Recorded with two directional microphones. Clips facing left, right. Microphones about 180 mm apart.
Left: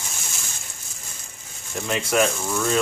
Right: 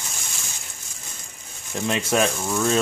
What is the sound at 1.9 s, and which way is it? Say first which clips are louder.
Speech: right 1 dB; 25° right (ahead or behind).